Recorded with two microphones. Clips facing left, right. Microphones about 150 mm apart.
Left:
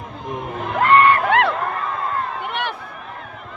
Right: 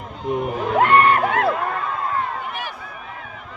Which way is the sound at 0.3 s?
5° right (ahead or behind).